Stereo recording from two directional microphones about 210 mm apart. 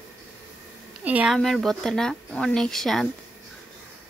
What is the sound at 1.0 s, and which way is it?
Speech, 5° right (ahead or behind).